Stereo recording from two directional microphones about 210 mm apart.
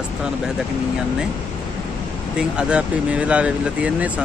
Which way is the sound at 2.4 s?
5° right (ahead or behind).